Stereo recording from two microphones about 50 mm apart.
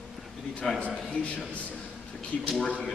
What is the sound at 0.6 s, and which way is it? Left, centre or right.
Speech, centre.